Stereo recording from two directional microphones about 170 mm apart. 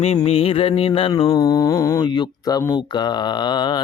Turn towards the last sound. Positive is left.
turn(degrees=25)  # may be behind; listen again after turning